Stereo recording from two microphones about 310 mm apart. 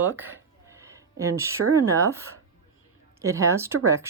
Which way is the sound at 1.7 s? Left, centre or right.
Centre.